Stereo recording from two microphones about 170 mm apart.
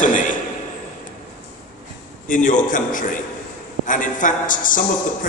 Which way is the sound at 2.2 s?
50° left (ahead or behind).